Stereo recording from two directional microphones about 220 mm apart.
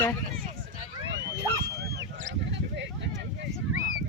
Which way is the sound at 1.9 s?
35° right (ahead or behind).